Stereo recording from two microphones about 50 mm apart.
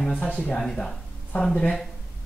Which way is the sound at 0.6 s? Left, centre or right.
Centre.